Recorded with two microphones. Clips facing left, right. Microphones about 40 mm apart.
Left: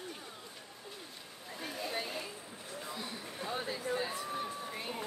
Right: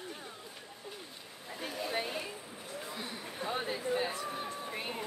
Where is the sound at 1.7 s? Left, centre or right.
Centre.